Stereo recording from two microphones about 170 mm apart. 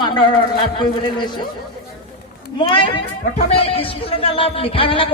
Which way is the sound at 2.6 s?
30° left (ahead or behind).